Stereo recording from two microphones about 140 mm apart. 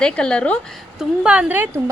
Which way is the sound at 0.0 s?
5° left (ahead or behind).